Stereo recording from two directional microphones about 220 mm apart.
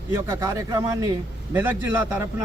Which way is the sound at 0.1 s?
15° right (ahead or behind).